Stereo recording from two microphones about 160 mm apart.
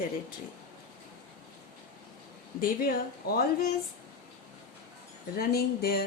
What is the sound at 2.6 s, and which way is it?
Speech, 65° left (ahead or behind).